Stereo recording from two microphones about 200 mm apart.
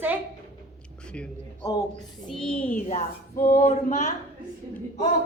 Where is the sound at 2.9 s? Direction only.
40° left (ahead or behind).